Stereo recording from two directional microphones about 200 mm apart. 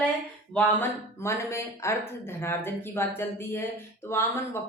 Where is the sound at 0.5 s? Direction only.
10° left (ahead or behind).